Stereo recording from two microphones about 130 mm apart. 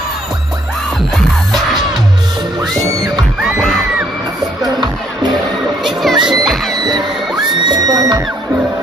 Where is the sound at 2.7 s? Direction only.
25° right (ahead or behind).